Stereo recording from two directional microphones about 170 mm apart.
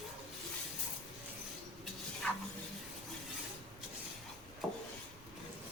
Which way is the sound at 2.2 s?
5° left (ahead or behind).